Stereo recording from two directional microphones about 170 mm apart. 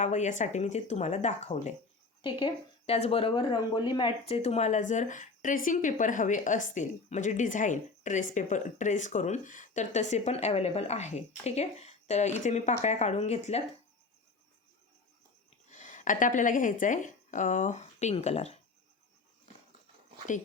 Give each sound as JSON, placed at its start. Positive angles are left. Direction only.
{"t": 0.0, "sound": "speech", "side_deg": 45}
{"t": 15.7, "sound": "a woman's voice", "side_deg": 45}